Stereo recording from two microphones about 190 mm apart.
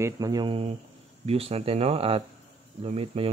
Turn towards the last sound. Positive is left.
turn(degrees=-30)  # may be behind; listen again after turning